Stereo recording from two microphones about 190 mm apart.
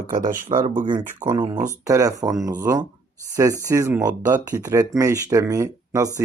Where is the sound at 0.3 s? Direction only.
45° right (ahead or behind).